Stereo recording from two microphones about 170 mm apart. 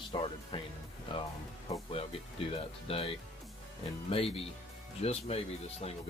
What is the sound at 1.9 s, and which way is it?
Speech, 35° left (ahead or behind).